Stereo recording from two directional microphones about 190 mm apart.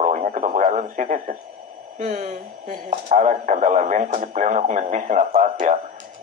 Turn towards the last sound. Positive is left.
turn(degrees=-40)  # may be behind; listen again after turning